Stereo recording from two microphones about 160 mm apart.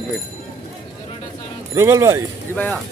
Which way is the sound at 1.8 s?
15° right (ahead or behind).